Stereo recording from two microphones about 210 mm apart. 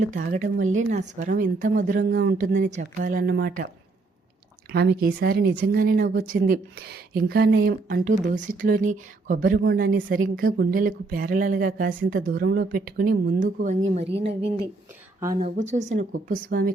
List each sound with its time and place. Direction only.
0.0 s speech: 40° right (ahead or behind)
4.7 s speech: 50° right (ahead or behind)
14.0 s speech: 55° right (ahead or behind)
15.4 s speech: 30° right (ahead or behind)